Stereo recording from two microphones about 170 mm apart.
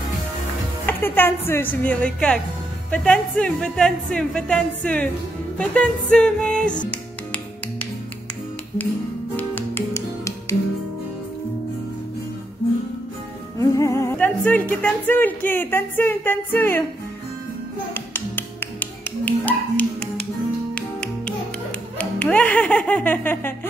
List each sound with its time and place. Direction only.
0.8 s a woman's voice: 10° left (ahead or behind)
9.4 s music: 10° left (ahead or behind)
13.6 s music: 15° left (ahead or behind)
14.1 s a woman's voice: 10° left (ahead or behind)
17.9 s music: 10° left (ahead or behind)
21.9 s speech: 10° left (ahead or behind)